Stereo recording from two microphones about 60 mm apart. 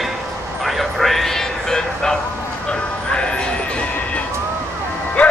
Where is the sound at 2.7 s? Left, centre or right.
Centre.